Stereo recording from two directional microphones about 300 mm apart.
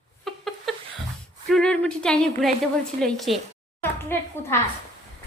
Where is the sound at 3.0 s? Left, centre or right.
Centre.